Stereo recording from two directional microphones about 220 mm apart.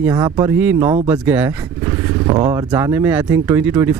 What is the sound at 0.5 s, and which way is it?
Speech, 10° right (ahead or behind).